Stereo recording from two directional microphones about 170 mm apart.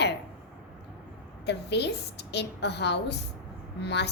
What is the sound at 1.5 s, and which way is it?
A woman's voice, 80° left.